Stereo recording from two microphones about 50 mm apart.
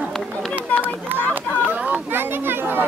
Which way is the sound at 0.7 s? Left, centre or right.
Left.